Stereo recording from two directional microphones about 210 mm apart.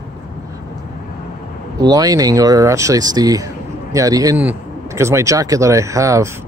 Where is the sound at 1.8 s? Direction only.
15° right (ahead or behind).